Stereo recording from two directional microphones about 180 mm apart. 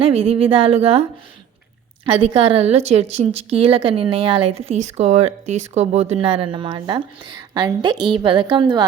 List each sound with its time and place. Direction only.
0.0 s a woman's voice: 35° right (ahead or behind)
2.2 s a woman's voice: 30° right (ahead or behind)